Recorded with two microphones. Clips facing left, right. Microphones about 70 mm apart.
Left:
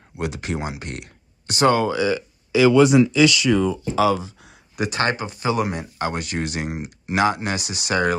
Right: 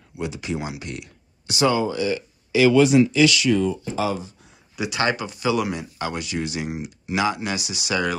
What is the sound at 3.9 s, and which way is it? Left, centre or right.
Speech, left.